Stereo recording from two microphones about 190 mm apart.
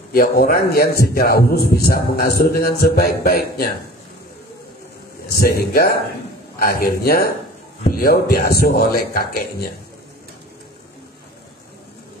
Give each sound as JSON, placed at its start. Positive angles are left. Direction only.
{"t": 0.1, "sound": "a man's voice", "side_deg": 50}
{"t": 5.3, "sound": "a man's voice", "side_deg": 50}